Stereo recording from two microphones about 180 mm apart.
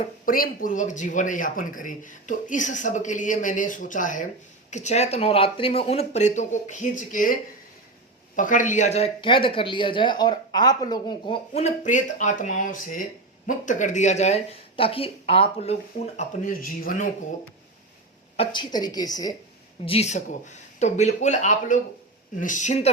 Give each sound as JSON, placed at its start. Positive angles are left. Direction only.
{"t": 0.3, "sound": "a man's voice", "side_deg": 50}
{"t": 8.4, "sound": "speech", "side_deg": 45}
{"t": 18.3, "sound": "a woman's voice", "side_deg": 25}
{"t": 19.8, "sound": "a man's voice", "side_deg": 35}